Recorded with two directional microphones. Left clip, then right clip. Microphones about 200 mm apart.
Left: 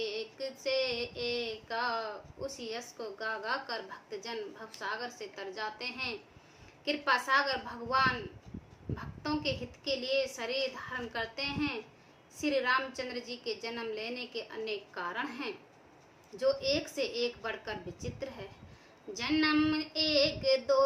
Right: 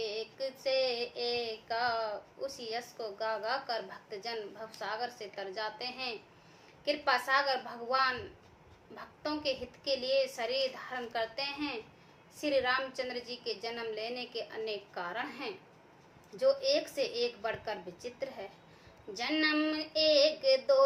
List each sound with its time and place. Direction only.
0.0 s child singing: 15° left (ahead or behind)
4.8 s a woman's voice: 15° left (ahead or behind)